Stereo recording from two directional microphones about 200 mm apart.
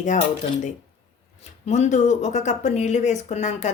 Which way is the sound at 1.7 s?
35° left (ahead or behind).